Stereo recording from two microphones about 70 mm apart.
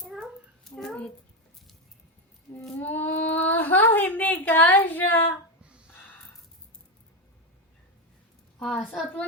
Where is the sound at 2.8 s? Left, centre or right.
Left.